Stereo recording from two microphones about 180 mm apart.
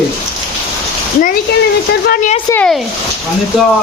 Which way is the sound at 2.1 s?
50° left (ahead or behind).